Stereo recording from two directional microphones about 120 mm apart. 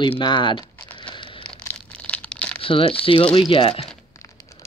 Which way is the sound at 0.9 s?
40° left (ahead or behind).